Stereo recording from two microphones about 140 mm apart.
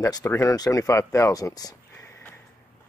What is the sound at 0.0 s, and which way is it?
Speech, 25° left (ahead or behind).